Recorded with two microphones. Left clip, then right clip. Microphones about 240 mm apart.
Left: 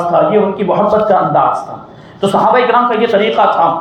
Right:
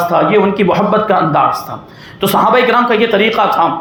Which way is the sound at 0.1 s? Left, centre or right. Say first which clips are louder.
Left 3 dB; right.